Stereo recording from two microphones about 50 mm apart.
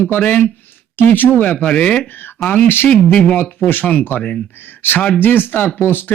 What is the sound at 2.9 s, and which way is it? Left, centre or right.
Speech, left.